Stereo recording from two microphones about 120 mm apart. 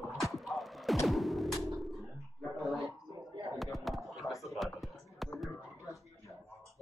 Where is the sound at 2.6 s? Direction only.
Centre (ahead or behind).